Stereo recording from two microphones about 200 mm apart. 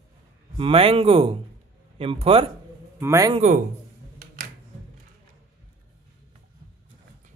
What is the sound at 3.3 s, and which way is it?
Speech, 35° right (ahead or behind).